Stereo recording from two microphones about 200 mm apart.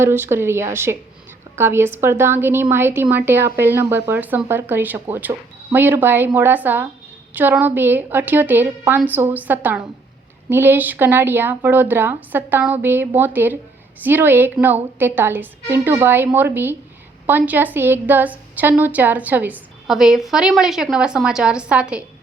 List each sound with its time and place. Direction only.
0.0 s a woman's voice: 10° right (ahead or behind)